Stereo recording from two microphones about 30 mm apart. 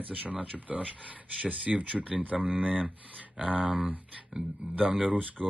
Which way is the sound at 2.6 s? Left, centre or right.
Right.